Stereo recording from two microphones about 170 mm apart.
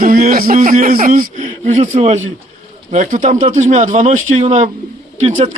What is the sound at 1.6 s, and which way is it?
A man's voice, 40° right (ahead or behind).